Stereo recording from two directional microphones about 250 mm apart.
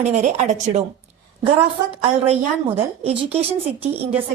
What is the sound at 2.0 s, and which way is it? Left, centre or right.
A woman's voice, right.